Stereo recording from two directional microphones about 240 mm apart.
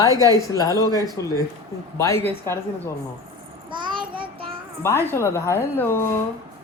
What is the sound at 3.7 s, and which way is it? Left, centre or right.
Child singing, centre.